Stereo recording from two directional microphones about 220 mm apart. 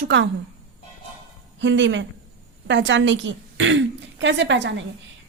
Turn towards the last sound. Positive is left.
turn(degrees=-55)  # may be behind; listen again after turning